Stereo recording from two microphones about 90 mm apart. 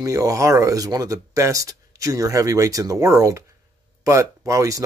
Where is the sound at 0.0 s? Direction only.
40° right (ahead or behind).